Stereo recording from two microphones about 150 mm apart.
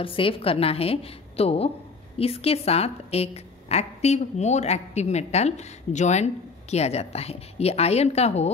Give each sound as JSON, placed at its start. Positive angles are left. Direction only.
{"t": 0.0, "sound": "a woman's voice", "side_deg": 35}